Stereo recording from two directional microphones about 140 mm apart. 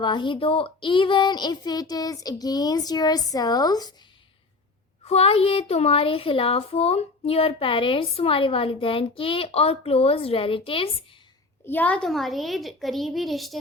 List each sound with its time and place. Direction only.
0.0 s speech: 35° left (ahead or behind)
5.0 s speech: 45° left (ahead or behind)
11.6 s a woman's voice: 15° left (ahead or behind)